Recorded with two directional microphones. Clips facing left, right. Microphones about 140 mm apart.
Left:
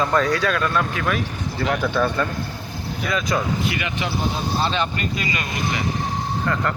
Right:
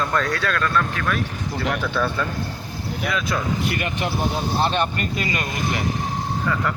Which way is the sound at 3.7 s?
50° right (ahead or behind).